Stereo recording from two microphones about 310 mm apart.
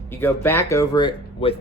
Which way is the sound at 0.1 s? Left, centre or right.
Centre.